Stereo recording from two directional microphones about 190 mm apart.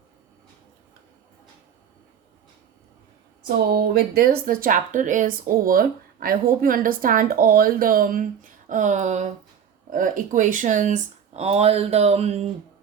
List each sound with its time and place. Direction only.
3.8 s speech: 55° right (ahead or behind); by 12.5 s 35° right (ahead or behind)